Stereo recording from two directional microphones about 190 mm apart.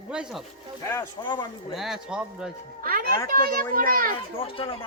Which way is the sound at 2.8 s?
50° right (ahead or behind).